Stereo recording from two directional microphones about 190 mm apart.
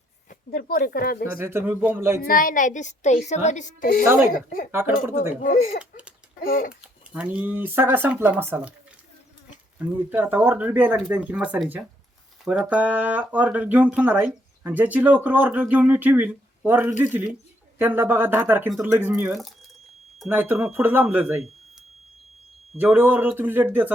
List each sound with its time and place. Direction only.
0.3 s speech: 55° left (ahead or behind)
1.3 s speech: 10° right (ahead or behind)
2.2 s a woman's voice: 45° left (ahead or behind)
4.7 s speech: 10° right (ahead or behind)
5.4 s speech: 45° left (ahead or behind)
6.8 s speech: 5° right (ahead or behind)
9.7 s speech: 10° right (ahead or behind)
19.3 s speech: centre (ahead or behind)
22.8 s speech: 10° right (ahead or behind)